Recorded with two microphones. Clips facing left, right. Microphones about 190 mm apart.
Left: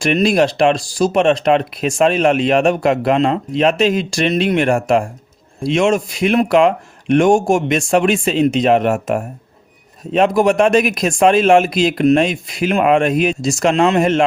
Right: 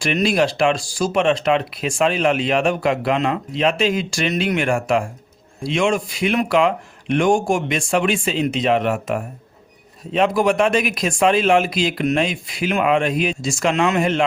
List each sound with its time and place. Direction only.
0.0 s speech: 45° left (ahead or behind)